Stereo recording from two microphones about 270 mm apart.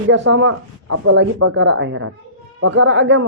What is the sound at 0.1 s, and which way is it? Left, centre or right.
A man's voice, right.